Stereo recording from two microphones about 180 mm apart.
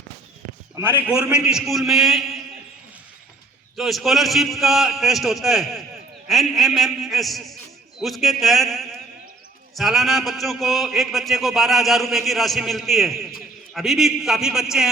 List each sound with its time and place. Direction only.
0.8 s a man's voice: 10° right (ahead or behind)
3.8 s a man's voice: centre (ahead or behind)